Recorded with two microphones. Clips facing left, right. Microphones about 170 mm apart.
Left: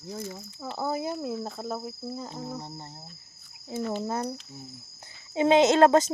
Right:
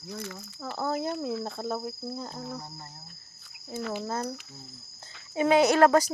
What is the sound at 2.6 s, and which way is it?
Speech, 25° left (ahead or behind).